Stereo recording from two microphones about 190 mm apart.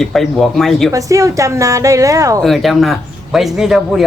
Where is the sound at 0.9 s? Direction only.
15° right (ahead or behind).